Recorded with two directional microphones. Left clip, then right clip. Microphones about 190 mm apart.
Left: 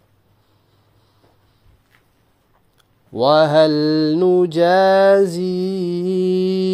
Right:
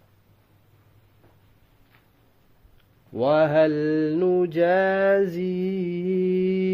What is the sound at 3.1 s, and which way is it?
Mantra, 35° left (ahead or behind).